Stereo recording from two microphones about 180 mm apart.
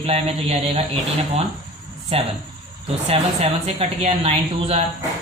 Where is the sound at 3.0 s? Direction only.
35° right (ahead or behind).